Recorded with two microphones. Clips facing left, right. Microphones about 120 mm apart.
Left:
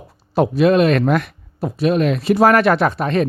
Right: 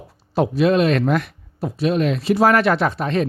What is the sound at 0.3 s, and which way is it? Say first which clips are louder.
Speech: left 3 dB; 55° left (ahead or behind).